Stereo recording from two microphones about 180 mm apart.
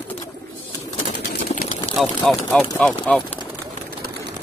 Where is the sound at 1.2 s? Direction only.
55° left (ahead or behind).